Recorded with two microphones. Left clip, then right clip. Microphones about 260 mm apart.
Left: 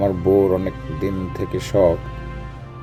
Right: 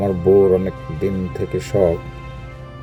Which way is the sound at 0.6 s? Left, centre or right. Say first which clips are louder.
Right 2 dB; centre.